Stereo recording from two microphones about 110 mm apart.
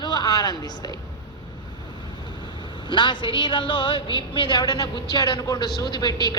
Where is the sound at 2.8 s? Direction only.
50° left (ahead or behind).